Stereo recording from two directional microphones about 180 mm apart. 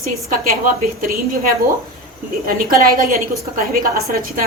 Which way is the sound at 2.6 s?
55° right (ahead or behind).